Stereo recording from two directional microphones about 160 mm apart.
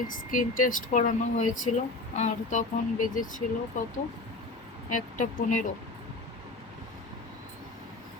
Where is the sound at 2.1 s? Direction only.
50° left (ahead or behind).